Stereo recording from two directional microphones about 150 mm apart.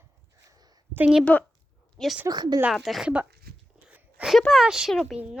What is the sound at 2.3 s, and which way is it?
Speech, 25° right (ahead or behind).